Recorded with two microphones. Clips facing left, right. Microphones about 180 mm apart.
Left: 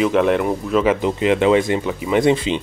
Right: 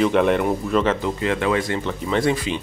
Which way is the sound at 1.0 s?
20° left (ahead or behind).